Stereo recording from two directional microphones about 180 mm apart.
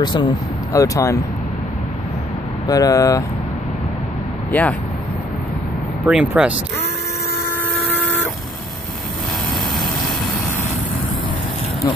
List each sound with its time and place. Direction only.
0.0 s speech: 25° left (ahead or behind)
2.7 s speech: 20° left (ahead or behind)
4.5 s speech: 10° left (ahead or behind)
6.0 s speech: 5° right (ahead or behind)
7.4 s vehicle: 10° left (ahead or behind)